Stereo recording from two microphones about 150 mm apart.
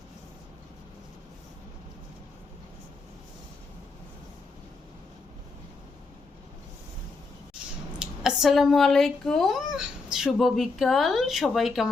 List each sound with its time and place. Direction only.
7.9 s speech: 5° right (ahead or behind)